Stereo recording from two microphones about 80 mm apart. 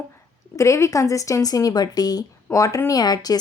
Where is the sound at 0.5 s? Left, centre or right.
Left.